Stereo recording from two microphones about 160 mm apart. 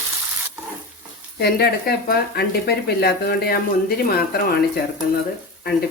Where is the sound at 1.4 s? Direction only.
75° left (ahead or behind).